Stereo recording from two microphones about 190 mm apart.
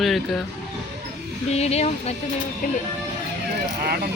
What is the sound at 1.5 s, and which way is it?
Speech, 35° left (ahead or behind).